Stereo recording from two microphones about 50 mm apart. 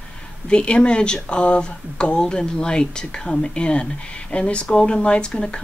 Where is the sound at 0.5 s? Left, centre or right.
Left.